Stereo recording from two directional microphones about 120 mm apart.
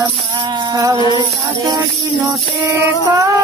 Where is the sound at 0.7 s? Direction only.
30° right (ahead or behind).